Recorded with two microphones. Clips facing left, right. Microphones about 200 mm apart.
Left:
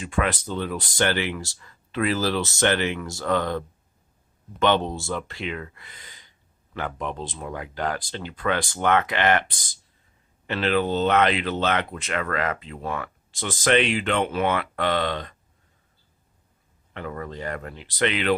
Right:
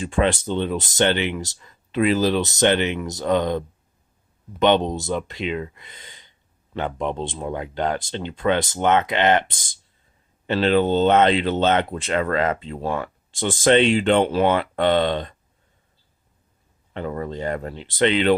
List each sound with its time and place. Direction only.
0.0 s speech: 30° right (ahead or behind)
4.6 s speech: 20° right (ahead or behind)
16.9 s speech: 30° right (ahead or behind)